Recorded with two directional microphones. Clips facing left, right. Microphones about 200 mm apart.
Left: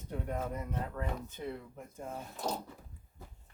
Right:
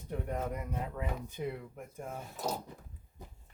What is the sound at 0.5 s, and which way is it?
Speech, 10° right (ahead or behind).